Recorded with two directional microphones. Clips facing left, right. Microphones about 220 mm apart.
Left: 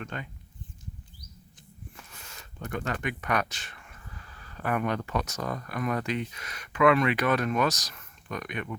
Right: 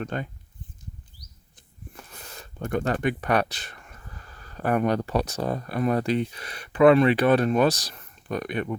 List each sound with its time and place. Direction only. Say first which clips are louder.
0.0 s speech: right 7 dB; 40° right (ahead or behind)
2.0 s speech: right 6 dB; 40° right (ahead or behind)